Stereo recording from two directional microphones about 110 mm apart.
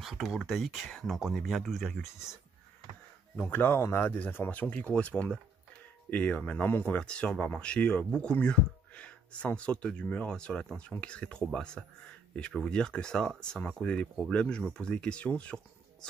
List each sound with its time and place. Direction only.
0.0 s speech: centre (ahead or behind)
3.3 s speech: 15° left (ahead or behind)